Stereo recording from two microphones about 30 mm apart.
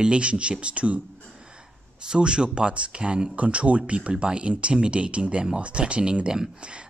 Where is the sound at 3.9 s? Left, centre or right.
Right.